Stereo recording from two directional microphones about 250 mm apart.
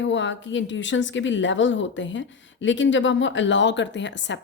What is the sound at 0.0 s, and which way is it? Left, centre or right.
A woman's voice, left.